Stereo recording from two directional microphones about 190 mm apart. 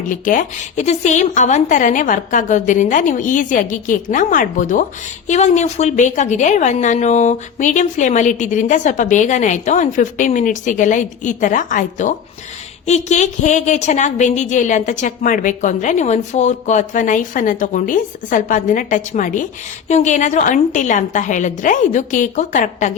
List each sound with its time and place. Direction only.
0.1 s a woman's voice: 45° left (ahead or behind)